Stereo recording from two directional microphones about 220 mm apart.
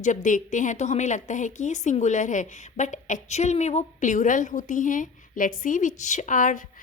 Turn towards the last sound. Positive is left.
turn(degrees=35)  # may be behind; listen again after turning